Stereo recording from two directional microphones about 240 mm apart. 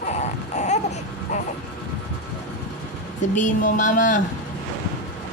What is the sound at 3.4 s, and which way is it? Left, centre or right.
Speech, left.